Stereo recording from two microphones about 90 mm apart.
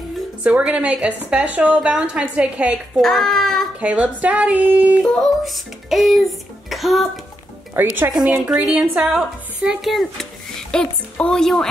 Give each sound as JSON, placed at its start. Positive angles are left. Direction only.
{"t": 0.4, "sound": "a woman's voice", "side_deg": -15}
{"t": 3.0, "sound": "a child's voice", "side_deg": 0}
{"t": 3.8, "sound": "a woman's voice", "side_deg": -15}
{"t": 5.0, "sound": "speech", "side_deg": 0}
{"t": 7.7, "sound": "speech", "side_deg": -20}
{"t": 8.1, "sound": "a woman's voice", "side_deg": -5}